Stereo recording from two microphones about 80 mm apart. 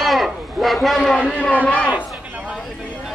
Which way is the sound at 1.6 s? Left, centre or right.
Centre.